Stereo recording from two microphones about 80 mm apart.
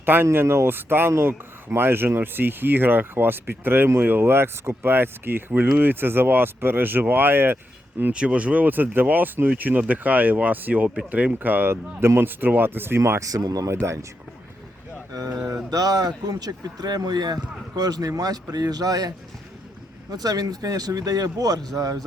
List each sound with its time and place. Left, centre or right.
0.0 s speech: right
8.1 s speech: centre
13.1 s speech: right
15.1 s speech: right